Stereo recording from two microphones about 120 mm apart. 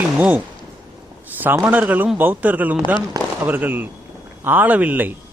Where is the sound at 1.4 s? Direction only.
15° right (ahead or behind).